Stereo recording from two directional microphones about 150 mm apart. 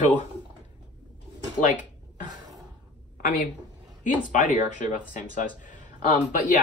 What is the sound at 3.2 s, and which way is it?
A woman's voice, 60° left (ahead or behind).